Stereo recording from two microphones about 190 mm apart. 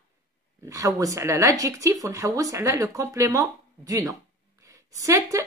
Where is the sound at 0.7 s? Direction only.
15° right (ahead or behind).